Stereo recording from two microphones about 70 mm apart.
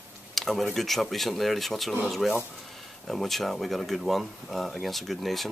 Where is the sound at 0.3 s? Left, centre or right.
Centre.